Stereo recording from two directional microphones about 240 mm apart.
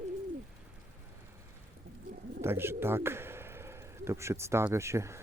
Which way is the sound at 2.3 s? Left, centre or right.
Centre.